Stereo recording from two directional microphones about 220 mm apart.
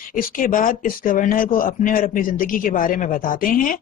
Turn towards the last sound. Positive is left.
turn(degrees=40)  # may be behind; listen again after turning